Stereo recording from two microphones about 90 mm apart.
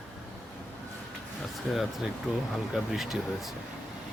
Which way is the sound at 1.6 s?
5° right (ahead or behind).